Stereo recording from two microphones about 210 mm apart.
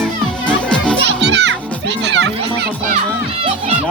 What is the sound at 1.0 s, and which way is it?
Children playing, 55° right (ahead or behind).